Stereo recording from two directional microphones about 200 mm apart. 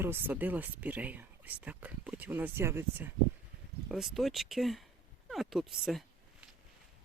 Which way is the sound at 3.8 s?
Centre (ahead or behind).